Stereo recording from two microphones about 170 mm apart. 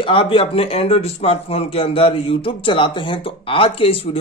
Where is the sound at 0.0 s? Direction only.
30° left (ahead or behind).